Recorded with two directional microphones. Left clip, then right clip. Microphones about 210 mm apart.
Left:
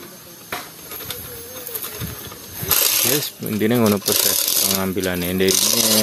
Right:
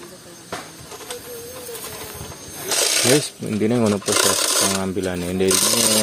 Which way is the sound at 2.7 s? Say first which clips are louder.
Right 2 dB; 45° left (ahead or behind).